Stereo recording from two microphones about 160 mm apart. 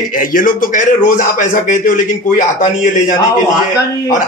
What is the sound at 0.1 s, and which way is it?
A man's voice, 60° left (ahead or behind).